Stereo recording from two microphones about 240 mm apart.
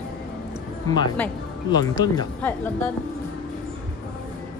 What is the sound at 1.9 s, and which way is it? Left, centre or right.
Speech, centre.